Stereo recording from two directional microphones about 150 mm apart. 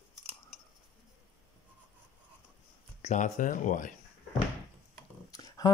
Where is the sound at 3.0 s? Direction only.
50° left (ahead or behind).